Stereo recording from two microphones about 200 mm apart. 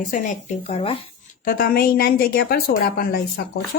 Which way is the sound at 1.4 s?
45° left (ahead or behind).